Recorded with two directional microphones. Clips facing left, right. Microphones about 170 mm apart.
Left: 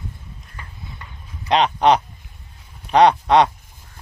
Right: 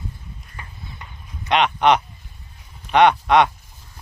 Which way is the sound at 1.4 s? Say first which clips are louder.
Left 1 dB; 35° left (ahead or behind).